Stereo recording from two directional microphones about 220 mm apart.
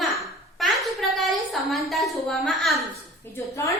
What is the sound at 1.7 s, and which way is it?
A woman's voice, centre (ahead or behind).